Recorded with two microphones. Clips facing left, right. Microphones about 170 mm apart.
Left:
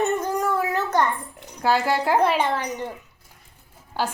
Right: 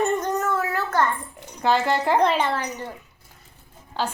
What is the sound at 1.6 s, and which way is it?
Speech, 5° left (ahead or behind).